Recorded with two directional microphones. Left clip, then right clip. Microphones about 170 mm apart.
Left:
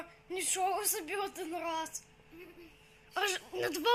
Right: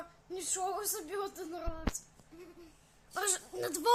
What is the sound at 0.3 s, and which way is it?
A woman's voice, 15° left (ahead or behind).